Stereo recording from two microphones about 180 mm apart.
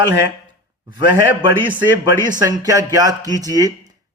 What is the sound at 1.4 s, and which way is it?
Speech, 25° right (ahead or behind).